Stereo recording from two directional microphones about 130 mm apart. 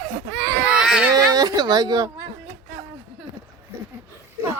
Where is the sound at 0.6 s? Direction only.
5° right (ahead or behind).